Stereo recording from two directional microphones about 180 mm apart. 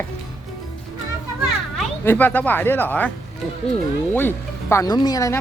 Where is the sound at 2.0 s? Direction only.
10° left (ahead or behind).